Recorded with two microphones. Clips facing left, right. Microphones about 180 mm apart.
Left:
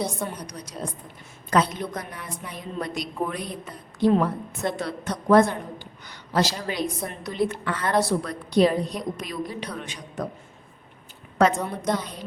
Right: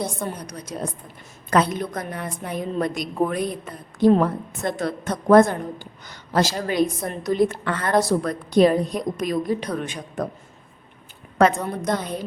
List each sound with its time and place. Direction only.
0.3 s a woman's voice: 55° right (ahead or behind)
11.4 s a woman's voice: 55° right (ahead or behind)